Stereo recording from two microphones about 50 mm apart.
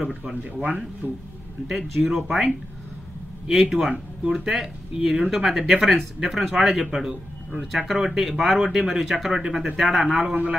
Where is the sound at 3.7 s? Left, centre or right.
Centre.